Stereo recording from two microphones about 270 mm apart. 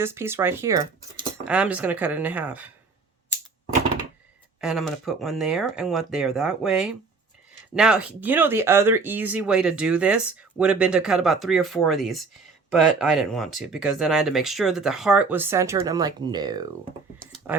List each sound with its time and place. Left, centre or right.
0.0 s speech: centre
4.6 s speech: centre
17.3 s typing: centre